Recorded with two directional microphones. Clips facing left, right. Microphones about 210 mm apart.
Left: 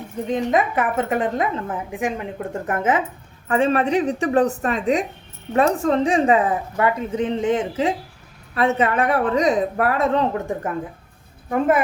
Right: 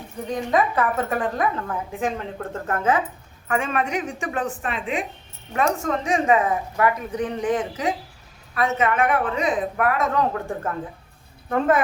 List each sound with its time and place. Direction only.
0.3 s speech: 20° left (ahead or behind)
3.5 s speech: 35° left (ahead or behind)
11.4 s speech: 10° left (ahead or behind)